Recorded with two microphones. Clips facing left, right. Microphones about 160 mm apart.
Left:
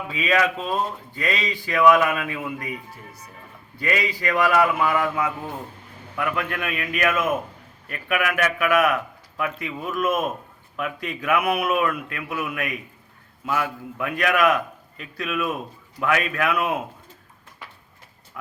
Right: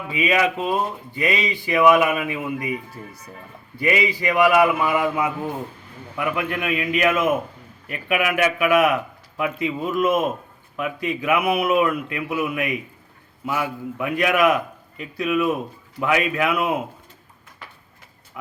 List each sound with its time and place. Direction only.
0.1 s speech: 10° right (ahead or behind)
3.8 s speech: 15° right (ahead or behind)